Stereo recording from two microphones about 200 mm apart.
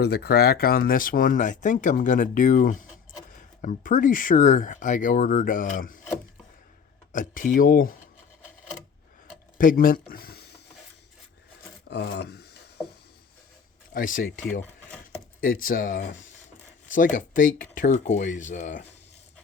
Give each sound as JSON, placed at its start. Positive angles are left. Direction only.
{"t": 0.0, "sound": "speech", "side_deg": 55}
{"t": 7.1, "sound": "speech", "side_deg": 40}
{"t": 9.6, "sound": "speech", "side_deg": 45}
{"t": 11.9, "sound": "rub", "side_deg": 60}
{"t": 13.9, "sound": "speech", "side_deg": 40}
{"t": 15.6, "sound": "speech", "side_deg": 45}